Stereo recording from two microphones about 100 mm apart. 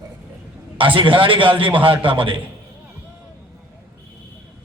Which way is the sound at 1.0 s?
60° right (ahead or behind).